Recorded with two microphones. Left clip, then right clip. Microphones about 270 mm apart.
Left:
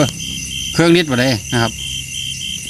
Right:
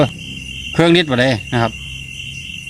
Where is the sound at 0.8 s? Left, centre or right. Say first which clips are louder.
Right 1 dB; centre.